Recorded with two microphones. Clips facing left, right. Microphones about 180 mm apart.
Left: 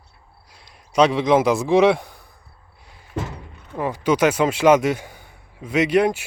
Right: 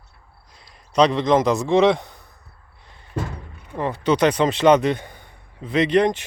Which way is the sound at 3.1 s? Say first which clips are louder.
Even; 20° left (ahead or behind).